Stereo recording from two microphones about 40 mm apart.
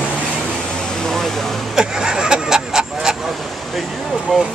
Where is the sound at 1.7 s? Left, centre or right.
Centre.